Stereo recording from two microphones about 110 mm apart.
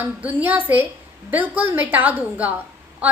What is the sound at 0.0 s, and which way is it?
A woman's voice, 15° right (ahead or behind).